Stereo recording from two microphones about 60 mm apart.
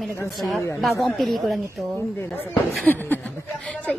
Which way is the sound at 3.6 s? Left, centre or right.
Left.